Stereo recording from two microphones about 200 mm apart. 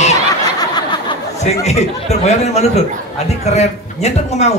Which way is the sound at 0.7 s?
20° left (ahead or behind).